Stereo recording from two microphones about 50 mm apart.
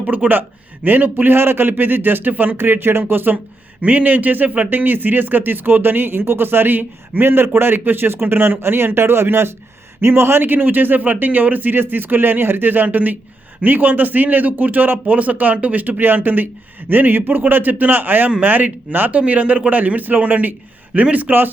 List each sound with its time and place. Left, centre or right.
0.0 s speech: right
3.3 s a man's voice: right
10.4 s speech: right